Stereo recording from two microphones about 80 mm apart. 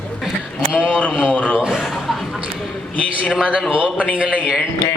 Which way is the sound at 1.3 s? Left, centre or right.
Centre.